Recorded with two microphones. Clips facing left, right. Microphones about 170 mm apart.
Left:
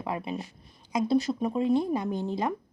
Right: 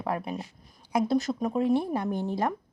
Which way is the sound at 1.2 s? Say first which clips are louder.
Even; centre (ahead or behind).